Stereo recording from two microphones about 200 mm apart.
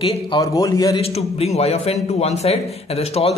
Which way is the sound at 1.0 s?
30° left (ahead or behind).